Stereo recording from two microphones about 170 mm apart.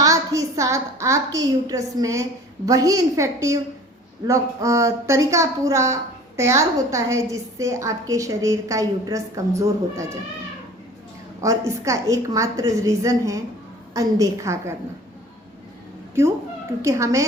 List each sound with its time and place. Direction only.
0.0 s a woman's voice: 20° right (ahead or behind)
11.3 s a woman's voice: 20° right (ahead or behind)
16.8 s a woman's voice: 20° right (ahead or behind)